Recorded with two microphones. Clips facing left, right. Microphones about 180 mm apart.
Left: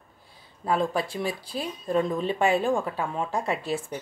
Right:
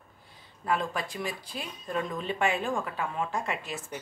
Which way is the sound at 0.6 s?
30° left (ahead or behind).